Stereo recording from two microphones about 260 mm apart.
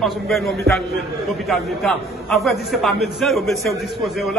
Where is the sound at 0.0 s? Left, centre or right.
Centre.